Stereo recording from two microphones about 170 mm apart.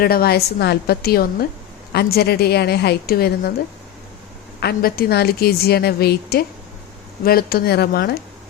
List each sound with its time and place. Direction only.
0.0 s a woman's voice: 65° left (ahead or behind)
4.6 s a woman's voice: 65° left (ahead or behind)